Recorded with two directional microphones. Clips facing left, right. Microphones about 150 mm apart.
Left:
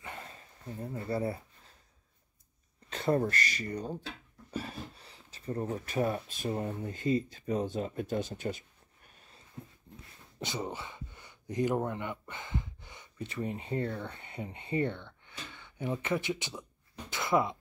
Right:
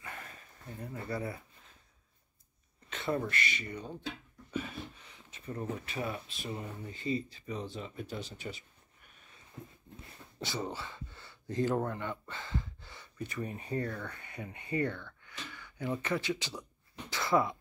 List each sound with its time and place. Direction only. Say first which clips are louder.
0.0 s a sound: left 2 dB; 25° left (ahead or behind)
2.9 s speech: left 5 dB; 40° left (ahead or behind)
10.4 s speech: left 1 dB; 20° left (ahead or behind)
17.1 s throat clearing: left 1 dB; 20° left (ahead or behind)